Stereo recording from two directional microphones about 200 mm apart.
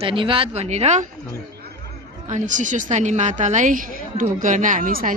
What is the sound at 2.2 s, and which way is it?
A woman's voice, 40° right (ahead or behind).